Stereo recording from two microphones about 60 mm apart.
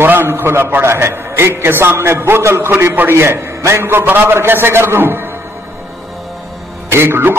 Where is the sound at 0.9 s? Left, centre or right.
Right.